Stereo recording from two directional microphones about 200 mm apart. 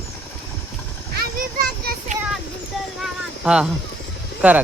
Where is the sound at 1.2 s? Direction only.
45° right (ahead or behind).